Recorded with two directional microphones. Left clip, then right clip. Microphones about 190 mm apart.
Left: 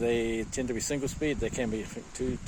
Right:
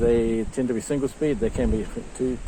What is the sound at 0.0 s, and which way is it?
Speech, 60° left (ahead or behind).